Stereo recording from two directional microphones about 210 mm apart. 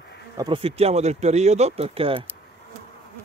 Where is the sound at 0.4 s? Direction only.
25° right (ahead or behind).